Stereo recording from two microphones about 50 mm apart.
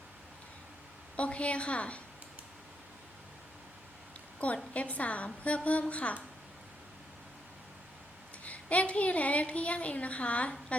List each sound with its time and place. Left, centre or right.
1.1 s a woman's voice: left
4.4 s a woman's voice: left
8.4 s a woman's voice: left